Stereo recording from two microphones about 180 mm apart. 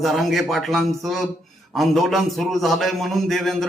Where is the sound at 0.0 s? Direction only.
Centre (ahead or behind).